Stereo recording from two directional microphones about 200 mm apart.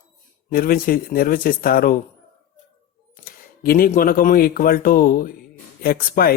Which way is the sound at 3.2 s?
45° left (ahead or behind).